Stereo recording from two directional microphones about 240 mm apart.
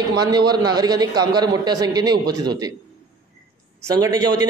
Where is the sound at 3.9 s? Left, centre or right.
Centre.